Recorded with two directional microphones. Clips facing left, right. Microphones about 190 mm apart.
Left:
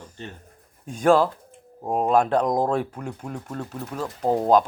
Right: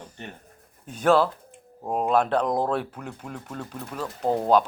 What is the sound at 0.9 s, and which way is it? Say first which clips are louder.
Speech: left 2 dB; 10° left (ahead or behind).